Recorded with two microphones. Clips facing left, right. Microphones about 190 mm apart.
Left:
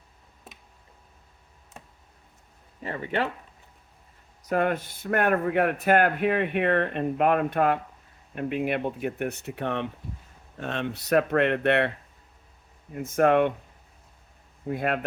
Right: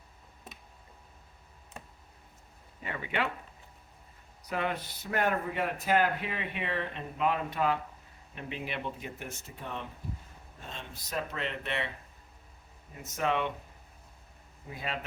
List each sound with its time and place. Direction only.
2.8 s speech: 40° left (ahead or behind)
4.4 s speech: 50° left (ahead or behind)
12.9 s speech: 55° left (ahead or behind)
14.7 s speech: 55° left (ahead or behind)